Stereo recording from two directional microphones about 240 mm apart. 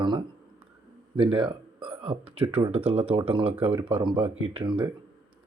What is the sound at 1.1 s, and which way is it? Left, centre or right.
Speech, right.